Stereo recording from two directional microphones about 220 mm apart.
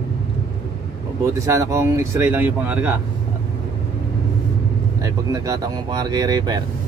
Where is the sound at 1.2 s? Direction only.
15° right (ahead or behind).